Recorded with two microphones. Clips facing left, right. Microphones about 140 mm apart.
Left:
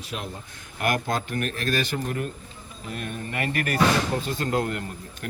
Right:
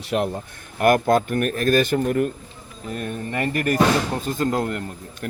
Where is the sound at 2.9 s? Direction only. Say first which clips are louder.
Right 5 dB; 40° right (ahead or behind).